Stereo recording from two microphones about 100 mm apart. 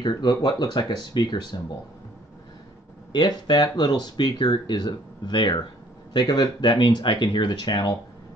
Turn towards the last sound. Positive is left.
turn(degrees=45)  # may be behind; listen again after turning